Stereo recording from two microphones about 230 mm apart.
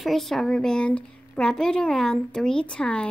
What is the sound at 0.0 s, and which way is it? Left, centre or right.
Speech, centre.